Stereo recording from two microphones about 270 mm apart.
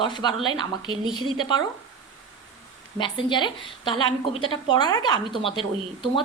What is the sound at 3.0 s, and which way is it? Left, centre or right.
A woman's voice, centre.